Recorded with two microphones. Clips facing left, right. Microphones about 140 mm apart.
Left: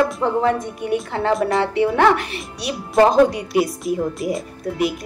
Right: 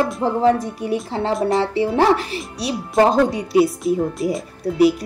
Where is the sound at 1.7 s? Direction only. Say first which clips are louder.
Left 2 dB; 30° right (ahead or behind).